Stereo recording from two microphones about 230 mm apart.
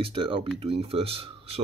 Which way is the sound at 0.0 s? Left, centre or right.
Right.